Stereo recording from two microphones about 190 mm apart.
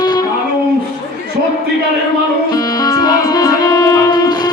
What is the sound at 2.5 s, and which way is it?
Music, 20° left (ahead or behind).